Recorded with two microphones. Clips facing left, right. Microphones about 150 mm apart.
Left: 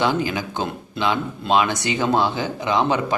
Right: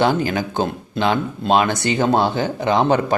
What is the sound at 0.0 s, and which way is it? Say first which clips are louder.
Speech: right 3 dB; 50° right (ahead or behind).